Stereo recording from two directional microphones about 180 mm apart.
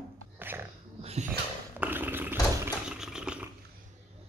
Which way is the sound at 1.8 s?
10° right (ahead or behind).